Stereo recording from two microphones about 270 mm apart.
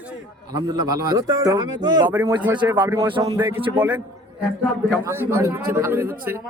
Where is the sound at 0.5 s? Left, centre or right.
Centre.